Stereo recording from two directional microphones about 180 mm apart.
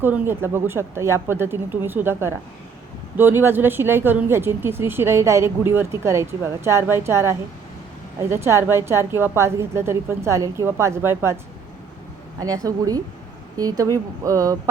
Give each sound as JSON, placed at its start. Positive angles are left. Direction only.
{"t": 0.0, "sound": "speech", "side_deg": -10}
{"t": 12.4, "sound": "speech", "side_deg": -20}